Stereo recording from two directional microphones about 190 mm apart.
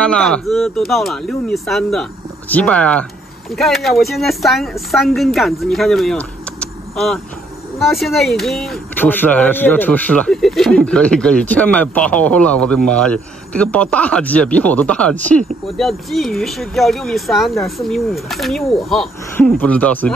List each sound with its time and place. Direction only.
0.0 s speech: 5° left (ahead or behind)